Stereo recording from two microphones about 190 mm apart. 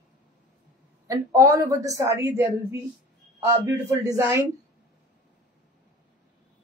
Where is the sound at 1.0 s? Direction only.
20° right (ahead or behind).